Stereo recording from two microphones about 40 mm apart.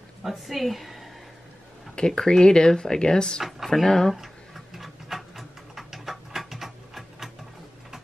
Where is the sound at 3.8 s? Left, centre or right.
Centre.